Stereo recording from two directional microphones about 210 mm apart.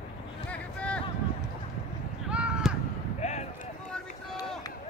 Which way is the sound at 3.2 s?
35° left (ahead or behind).